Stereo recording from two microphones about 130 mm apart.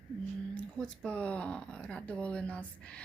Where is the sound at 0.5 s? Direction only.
5° left (ahead or behind).